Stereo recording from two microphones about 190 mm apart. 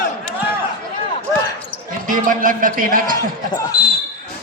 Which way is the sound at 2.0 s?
45° right (ahead or behind).